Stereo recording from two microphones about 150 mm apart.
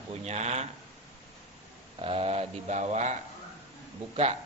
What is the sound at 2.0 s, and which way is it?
Speech, 40° right (ahead or behind).